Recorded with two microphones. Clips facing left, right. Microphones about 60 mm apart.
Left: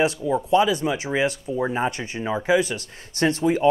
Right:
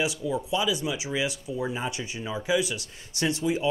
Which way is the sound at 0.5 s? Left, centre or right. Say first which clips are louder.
Left 10 dB; left.